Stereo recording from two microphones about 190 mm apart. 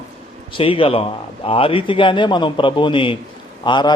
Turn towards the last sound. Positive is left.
turn(degrees=25)  # may be behind; listen again after turning